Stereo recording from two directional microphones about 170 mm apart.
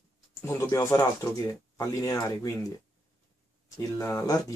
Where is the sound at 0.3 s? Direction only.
20° left (ahead or behind).